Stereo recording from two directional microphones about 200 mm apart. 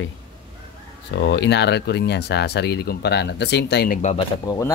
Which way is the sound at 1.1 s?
60° left (ahead or behind).